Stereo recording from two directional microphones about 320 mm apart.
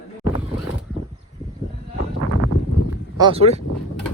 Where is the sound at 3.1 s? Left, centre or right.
Centre.